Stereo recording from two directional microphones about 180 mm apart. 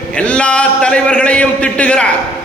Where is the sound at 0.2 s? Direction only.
5° left (ahead or behind).